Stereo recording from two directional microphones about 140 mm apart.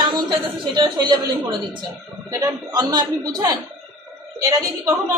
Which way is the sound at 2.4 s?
30° right (ahead or behind).